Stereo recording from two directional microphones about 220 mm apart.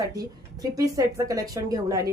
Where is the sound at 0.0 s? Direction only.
15° right (ahead or behind).